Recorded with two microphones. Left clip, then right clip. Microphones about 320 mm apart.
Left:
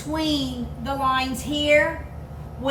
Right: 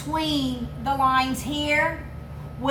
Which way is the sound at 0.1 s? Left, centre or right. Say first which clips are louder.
Even; centre.